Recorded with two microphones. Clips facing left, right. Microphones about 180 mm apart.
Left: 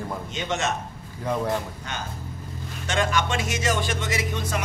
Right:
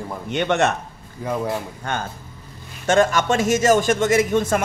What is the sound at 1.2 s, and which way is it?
Speech, 5° right (ahead or behind).